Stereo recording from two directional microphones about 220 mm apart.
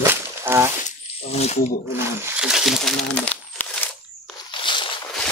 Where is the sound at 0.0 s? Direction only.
10° right (ahead or behind).